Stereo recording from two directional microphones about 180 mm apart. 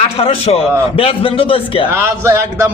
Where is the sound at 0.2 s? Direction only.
35° left (ahead or behind).